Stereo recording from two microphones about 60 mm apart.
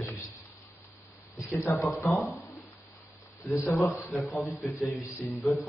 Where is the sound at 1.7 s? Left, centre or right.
Left.